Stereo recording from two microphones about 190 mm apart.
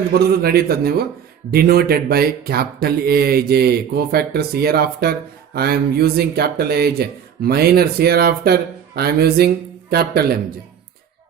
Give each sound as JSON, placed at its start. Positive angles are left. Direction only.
{"t": 0.1, "sound": "speech", "side_deg": -55}